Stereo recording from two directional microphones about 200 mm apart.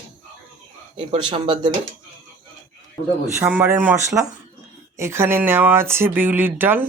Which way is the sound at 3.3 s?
10° right (ahead or behind).